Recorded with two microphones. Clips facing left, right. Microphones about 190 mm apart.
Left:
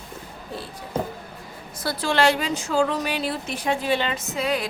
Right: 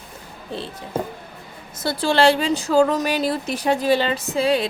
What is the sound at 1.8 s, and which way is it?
A woman's voice, 30° right (ahead or behind).